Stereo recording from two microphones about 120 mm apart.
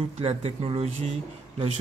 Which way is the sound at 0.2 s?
60° right (ahead or behind).